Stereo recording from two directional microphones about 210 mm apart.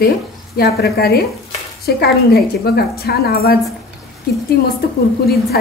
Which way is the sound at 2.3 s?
50° left (ahead or behind).